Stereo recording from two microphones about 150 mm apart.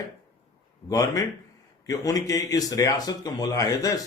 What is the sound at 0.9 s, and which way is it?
Speech, 25° left (ahead or behind).